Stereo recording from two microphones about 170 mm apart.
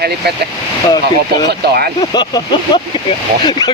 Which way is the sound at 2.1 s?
25° left (ahead or behind).